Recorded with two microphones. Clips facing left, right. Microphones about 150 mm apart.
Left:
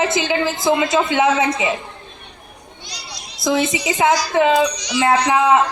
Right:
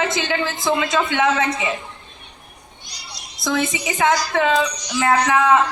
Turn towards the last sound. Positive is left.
turn(degrees=20)  # may be behind; listen again after turning